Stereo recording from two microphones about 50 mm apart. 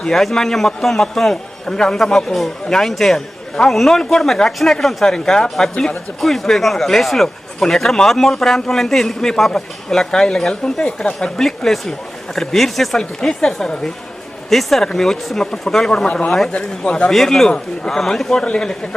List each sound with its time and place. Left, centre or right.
0.0 s a man's voice: centre
10.8 s speech: left
11.3 s a man's voice: centre
17.1 s a man's voice: centre